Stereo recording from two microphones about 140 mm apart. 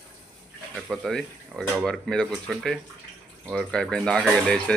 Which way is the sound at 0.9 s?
Centre (ahead or behind).